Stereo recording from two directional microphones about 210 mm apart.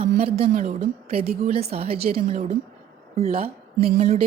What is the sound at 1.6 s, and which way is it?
Speech, 30° right (ahead or behind).